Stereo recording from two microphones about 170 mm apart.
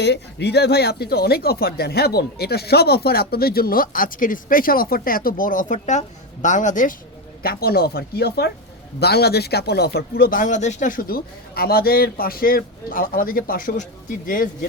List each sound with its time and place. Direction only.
0.0 s speech: 85° left; by 6.9 s 50° left (ahead or behind)
7.4 s speech: 65° left (ahead or behind)